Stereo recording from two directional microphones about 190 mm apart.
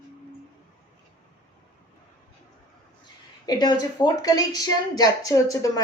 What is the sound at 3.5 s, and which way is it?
A woman's voice, 20° left (ahead or behind).